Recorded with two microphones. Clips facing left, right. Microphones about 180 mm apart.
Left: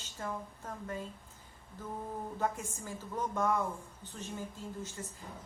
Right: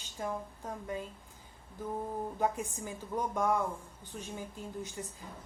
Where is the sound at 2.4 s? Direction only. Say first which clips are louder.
Right 2 dB; 15° right (ahead or behind).